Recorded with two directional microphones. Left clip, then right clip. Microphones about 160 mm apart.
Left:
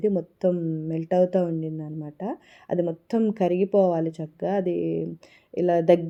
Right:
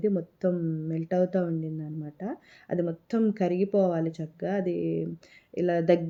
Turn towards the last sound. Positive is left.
turn(degrees=25)  # may be behind; listen again after turning